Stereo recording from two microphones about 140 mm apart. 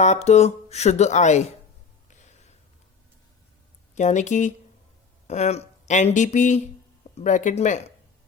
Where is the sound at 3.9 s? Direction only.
60° left (ahead or behind).